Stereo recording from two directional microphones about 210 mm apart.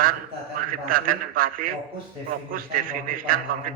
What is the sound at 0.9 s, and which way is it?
A man's voice, 45° right (ahead or behind).